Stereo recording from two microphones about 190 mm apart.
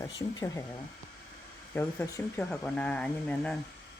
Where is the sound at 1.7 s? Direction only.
15° left (ahead or behind).